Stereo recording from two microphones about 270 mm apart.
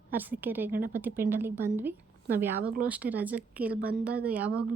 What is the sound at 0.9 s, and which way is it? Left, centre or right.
A woman's voice, centre.